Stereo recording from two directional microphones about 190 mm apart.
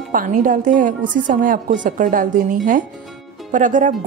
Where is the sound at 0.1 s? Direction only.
45° right (ahead or behind).